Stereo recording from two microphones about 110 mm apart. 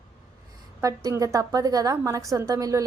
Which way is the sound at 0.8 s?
30° right (ahead or behind).